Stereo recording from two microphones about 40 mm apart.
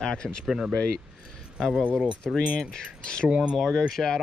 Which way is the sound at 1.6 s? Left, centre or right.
Centre.